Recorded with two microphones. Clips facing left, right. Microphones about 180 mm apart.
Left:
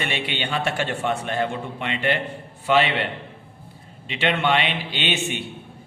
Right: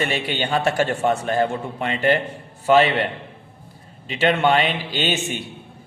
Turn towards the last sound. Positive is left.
turn(degrees=-40)  # may be behind; listen again after turning